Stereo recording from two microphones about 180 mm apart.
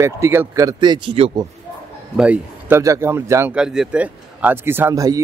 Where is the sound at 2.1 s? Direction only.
5° right (ahead or behind).